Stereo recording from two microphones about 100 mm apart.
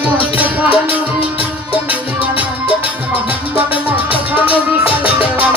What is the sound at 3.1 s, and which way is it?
Music, 15° right (ahead or behind).